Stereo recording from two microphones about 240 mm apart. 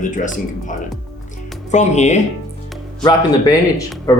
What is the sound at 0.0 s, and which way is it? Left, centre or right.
Speech, left.